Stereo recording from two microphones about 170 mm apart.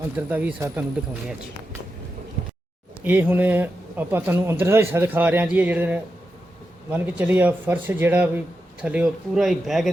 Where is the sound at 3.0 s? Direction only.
10° right (ahead or behind).